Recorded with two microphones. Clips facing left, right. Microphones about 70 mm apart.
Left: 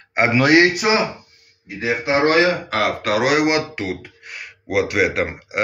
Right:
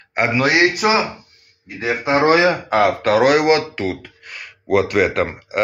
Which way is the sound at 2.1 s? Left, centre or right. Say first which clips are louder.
Right 2 dB; centre.